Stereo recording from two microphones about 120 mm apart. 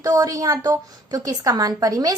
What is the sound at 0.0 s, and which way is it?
A woman's voice, 30° right (ahead or behind).